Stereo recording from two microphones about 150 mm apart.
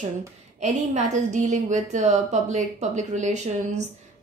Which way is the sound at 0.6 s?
50° right (ahead or behind).